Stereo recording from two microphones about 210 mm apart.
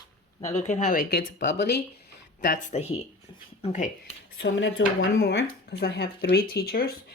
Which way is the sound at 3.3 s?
20° left (ahead or behind).